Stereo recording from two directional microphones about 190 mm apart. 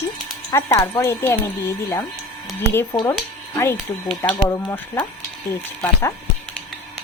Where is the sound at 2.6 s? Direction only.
15° left (ahead or behind).